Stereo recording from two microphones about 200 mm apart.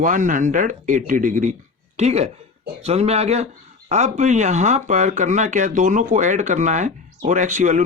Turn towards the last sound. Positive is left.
turn(degrees=-40)  # may be behind; listen again after turning